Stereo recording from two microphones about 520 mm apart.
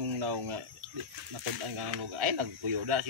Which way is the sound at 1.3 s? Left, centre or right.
Right.